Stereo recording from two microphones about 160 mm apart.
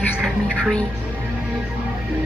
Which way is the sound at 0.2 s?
Centre (ahead or behind).